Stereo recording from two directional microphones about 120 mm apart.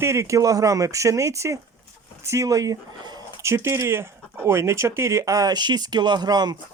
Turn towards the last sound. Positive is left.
turn(degrees=-35)  # may be behind; listen again after turning